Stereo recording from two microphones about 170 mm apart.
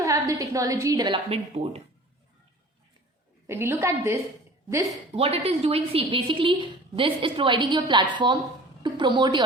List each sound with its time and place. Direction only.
0.0 s a woman's voice: 20° right (ahead or behind); by 1.8 s 35° right (ahead or behind)
3.4 s a woman's voice: 15° right (ahead or behind)
5.1 s a woman's voice: 35° right (ahead or behind)